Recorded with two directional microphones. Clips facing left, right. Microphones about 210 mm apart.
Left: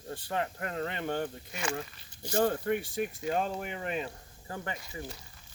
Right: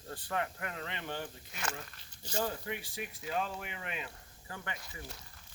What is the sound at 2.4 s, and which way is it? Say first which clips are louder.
Speech: left 9 dB; 55° left (ahead or behind).